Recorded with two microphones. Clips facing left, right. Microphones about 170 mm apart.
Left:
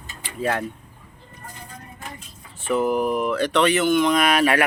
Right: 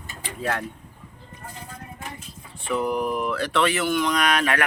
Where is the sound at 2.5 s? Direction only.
5° left (ahead or behind).